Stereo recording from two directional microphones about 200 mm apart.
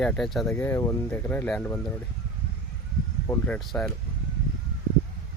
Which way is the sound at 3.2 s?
5° left (ahead or behind).